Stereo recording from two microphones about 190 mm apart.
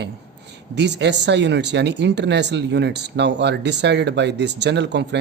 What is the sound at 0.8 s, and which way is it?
Speech, 65° right (ahead or behind).